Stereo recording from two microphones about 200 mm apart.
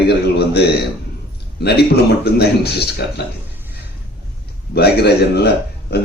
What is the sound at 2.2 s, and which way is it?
A man's voice, 55° left (ahead or behind).